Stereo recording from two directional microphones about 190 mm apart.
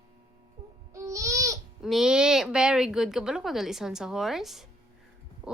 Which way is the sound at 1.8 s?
Centre (ahead or behind).